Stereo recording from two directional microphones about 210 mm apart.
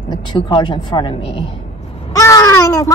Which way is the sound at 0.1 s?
25° left (ahead or behind).